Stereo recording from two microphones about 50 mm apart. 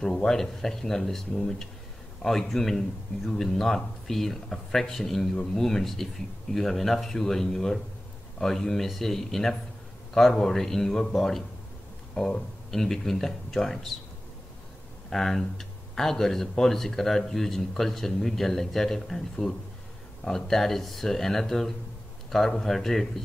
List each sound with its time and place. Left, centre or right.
0.0 s speech: centre
12.2 s speech: centre
15.0 s speech: centre